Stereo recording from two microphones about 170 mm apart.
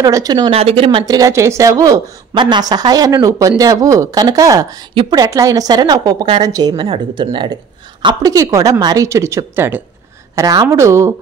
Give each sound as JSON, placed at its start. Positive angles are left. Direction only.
{"t": 0.0, "sound": "speech", "side_deg": -20}
{"t": 1.0, "sound": "speech", "side_deg": -20}